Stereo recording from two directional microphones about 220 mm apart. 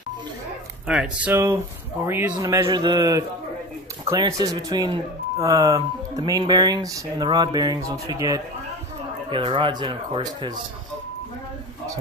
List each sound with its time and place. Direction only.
0.8 s speech: 5° right (ahead or behind); by 10.6 s 20° right (ahead or behind)